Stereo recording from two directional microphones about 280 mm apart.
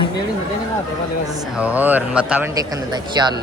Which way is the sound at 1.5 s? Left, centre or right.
Centre.